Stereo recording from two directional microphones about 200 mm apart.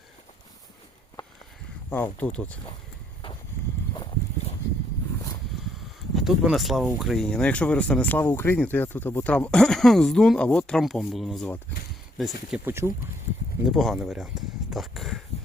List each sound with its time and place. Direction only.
1.9 s speech: 10° left (ahead or behind)
3.9 s a sound: 20° left (ahead or behind)
6.1 s speech: centre (ahead or behind)
12.6 s speech: 10° right (ahead or behind)
13.7 s speech: centre (ahead or behind)